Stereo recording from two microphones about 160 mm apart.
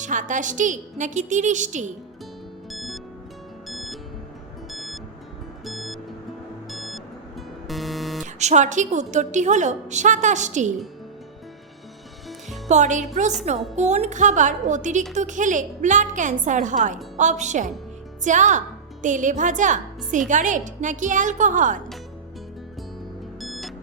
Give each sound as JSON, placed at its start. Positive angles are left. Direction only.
{"t": 0.0, "sound": "a woman's voice", "side_deg": -55}
{"t": 2.6, "sound": "music", "side_deg": 0}
{"t": 8.2, "sound": "a woman's voice", "side_deg": -45}
{"t": 12.6, "sound": "music", "side_deg": -50}
{"t": 13.7, "sound": "a woman's voice", "side_deg": -45}
{"t": 23.4, "sound": "music", "side_deg": 0}